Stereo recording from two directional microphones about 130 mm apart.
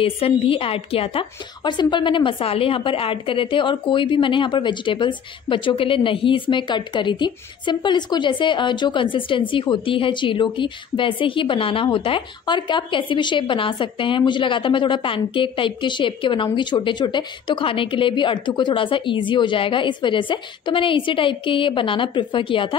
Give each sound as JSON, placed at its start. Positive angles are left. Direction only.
{"t": 0.0, "sound": "a woman's voice", "side_deg": 45}